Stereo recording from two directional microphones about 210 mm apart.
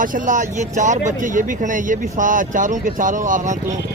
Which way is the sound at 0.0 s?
40° right (ahead or behind).